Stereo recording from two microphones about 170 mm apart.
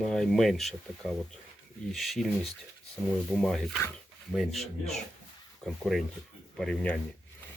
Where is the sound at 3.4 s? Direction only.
Centre (ahead or behind).